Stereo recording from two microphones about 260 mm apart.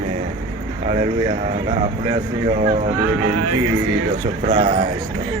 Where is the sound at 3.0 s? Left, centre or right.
Right.